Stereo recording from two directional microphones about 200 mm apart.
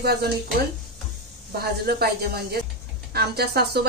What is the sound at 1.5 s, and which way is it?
Speech, 50° right (ahead or behind).